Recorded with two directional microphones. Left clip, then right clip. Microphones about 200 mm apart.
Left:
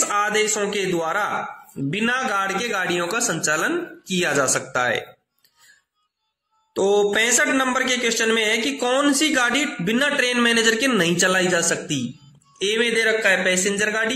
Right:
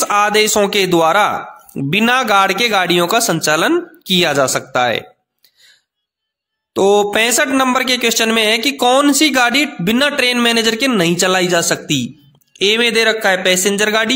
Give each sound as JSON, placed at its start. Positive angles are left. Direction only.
{"t": 0.0, "sound": "a man's voice", "side_deg": -50}
{"t": 6.7, "sound": "a man's voice", "side_deg": -45}